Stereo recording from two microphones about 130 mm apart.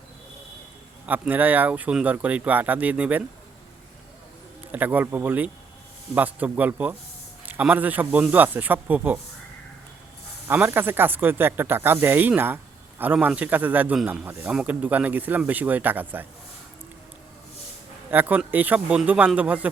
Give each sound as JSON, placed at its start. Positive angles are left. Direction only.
{"t": 1.0, "sound": "a man's voice", "side_deg": -10}
{"t": 4.7, "sound": "a man's voice", "side_deg": -15}
{"t": 10.5, "sound": "a man's voice", "side_deg": -15}
{"t": 18.1, "sound": "a man's voice", "side_deg": -15}